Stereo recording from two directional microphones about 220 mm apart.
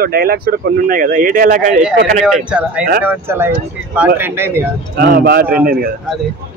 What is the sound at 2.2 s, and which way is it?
Speech, 5° right (ahead or behind).